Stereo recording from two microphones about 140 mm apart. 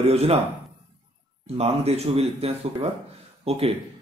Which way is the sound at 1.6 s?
45° right (ahead or behind).